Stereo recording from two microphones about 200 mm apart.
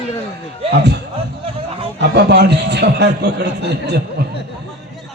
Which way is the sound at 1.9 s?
55° right (ahead or behind).